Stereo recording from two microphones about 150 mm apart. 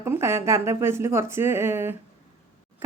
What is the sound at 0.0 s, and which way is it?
A woman's voice, 15° right (ahead or behind).